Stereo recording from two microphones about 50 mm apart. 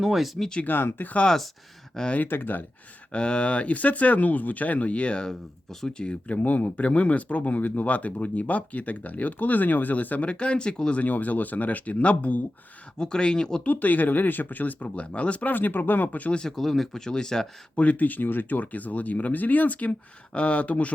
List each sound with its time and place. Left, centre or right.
0.0 s speech: centre
0.6 s speech: left
2.2 s speech: left
3.1 s speech: centre
11.0 s speech: left
13.0 s speech: centre
13.7 s speech: left
15.5 s speech: left
16.3 s speech: centre
16.6 s speech: centre
17.7 s speech: left